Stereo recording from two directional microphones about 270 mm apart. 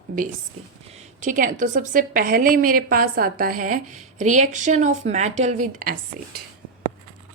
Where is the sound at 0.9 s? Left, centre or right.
Right.